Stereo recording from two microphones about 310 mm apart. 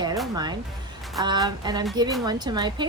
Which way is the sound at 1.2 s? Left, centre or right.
Centre.